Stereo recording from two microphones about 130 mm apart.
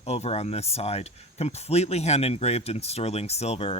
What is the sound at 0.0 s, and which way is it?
Speech, 55° left (ahead or behind).